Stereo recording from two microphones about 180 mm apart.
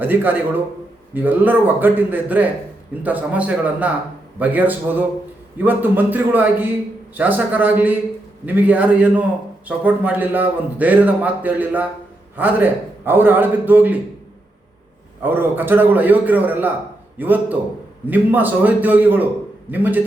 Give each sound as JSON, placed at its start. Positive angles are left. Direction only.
{"t": 0.0, "sound": "a man's voice", "side_deg": -10}
{"t": 15.2, "sound": "a man's voice", "side_deg": -10}